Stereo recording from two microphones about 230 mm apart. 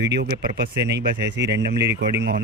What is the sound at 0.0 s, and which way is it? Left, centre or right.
Speech, right.